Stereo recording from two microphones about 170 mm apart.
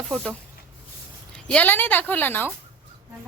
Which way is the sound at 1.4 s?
10° left (ahead or behind).